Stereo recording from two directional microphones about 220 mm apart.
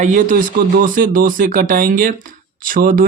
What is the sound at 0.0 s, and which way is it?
Speech, 35° right (ahead or behind).